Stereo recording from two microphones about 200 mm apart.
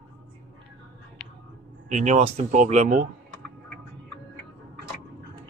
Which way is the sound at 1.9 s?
35° right (ahead or behind).